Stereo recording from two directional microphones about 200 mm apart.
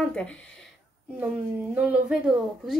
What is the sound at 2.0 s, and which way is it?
Speech, centre (ahead or behind).